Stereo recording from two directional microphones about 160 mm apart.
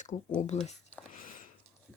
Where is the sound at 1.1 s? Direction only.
55° left (ahead or behind).